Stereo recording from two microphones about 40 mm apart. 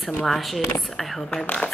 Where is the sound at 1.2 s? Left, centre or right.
Centre.